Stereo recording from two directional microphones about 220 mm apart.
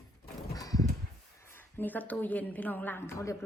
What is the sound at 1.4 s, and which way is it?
A woman's voice, 10° left (ahead or behind).